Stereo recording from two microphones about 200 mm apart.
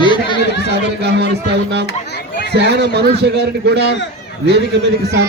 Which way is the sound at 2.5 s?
55° right (ahead or behind).